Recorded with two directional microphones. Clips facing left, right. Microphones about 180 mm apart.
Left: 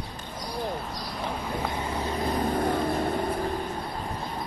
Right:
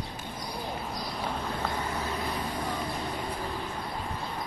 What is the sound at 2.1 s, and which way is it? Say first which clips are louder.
Vehicle: left 7 dB; 45° left (ahead or behind).